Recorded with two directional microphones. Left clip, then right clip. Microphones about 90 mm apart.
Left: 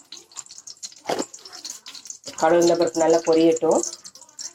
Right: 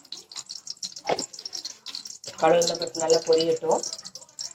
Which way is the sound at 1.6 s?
35° left (ahead or behind).